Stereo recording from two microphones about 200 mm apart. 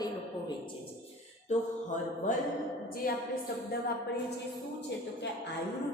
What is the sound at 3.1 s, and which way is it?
Speech, 45° left (ahead or behind).